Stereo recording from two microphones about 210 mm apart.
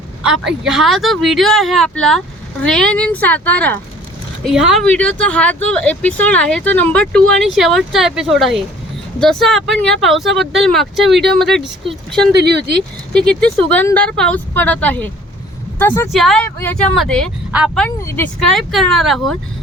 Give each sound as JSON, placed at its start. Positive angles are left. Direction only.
{"t": 0.2, "sound": "a woman's voice", "side_deg": -5}
{"t": 12.4, "sound": "speech", "side_deg": -55}
{"t": 13.1, "sound": "speech", "side_deg": 5}
{"t": 17.8, "sound": "speech", "side_deg": 10}